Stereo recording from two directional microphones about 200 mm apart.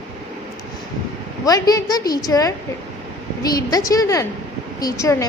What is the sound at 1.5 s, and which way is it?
A woman's voice, 20° left (ahead or behind).